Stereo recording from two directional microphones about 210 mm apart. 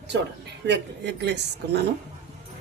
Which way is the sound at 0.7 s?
55° right (ahead or behind).